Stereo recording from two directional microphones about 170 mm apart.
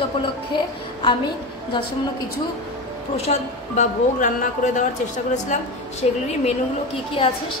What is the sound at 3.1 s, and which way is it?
Speech, 40° left (ahead or behind).